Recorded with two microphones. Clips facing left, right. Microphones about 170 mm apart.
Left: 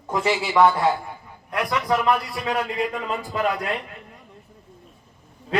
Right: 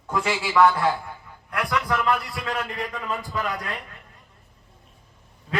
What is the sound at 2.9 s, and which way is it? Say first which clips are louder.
Speech: left 3 dB; 35° left (ahead or behind).